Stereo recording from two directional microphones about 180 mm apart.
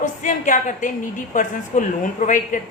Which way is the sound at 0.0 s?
45° left (ahead or behind).